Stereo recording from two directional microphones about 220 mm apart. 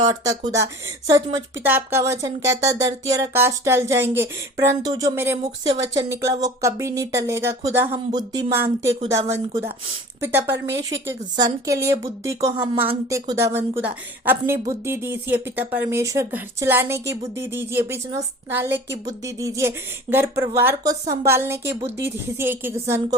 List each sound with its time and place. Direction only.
0.0 s speech: 20° right (ahead or behind)
12.5 s speech: 25° right (ahead or behind)
13.1 s speech: 15° right (ahead or behind)